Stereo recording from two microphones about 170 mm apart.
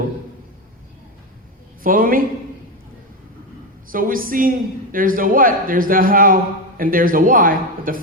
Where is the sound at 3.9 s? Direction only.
55° right (ahead or behind).